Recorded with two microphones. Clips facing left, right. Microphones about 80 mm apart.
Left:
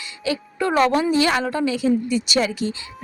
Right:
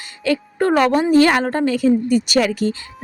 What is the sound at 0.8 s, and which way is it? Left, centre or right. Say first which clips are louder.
Speech: right 3 dB; right.